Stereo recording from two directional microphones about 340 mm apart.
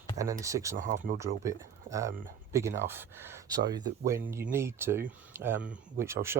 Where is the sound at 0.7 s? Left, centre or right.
Right.